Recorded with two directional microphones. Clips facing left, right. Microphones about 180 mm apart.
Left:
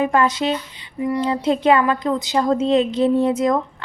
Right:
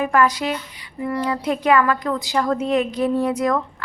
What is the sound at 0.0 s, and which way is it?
A woman's voice, 25° left (ahead or behind).